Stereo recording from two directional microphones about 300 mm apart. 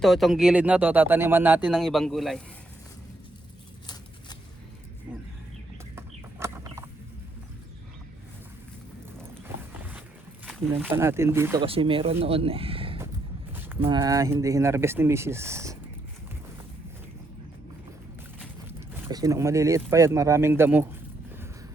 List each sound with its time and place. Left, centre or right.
0.0 s speech: centre
6.0 s a sound: centre
9.6 s a sound: centre
10.4 s speech: centre
13.5 s speech: centre
19.0 s speech: centre